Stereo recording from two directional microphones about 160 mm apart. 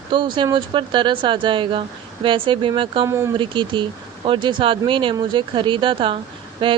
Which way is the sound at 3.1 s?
15° right (ahead or behind).